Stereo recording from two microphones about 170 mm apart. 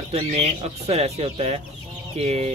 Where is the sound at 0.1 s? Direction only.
40° right (ahead or behind).